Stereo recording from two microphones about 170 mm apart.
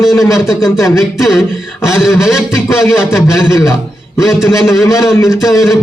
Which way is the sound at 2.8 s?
15° left (ahead or behind).